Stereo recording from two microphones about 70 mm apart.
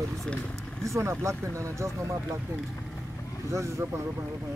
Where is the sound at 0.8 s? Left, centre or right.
Right.